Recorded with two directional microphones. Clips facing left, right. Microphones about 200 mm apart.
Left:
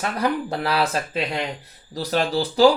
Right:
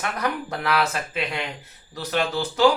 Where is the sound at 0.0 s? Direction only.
30° left (ahead or behind).